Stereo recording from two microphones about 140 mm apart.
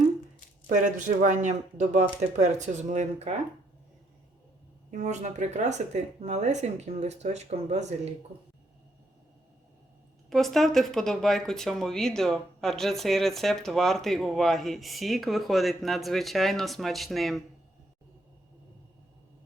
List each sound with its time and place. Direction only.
0.7 s speech: 65° right (ahead or behind)
4.9 s speech: 60° right (ahead or behind)
10.2 s speech: centre (ahead or behind)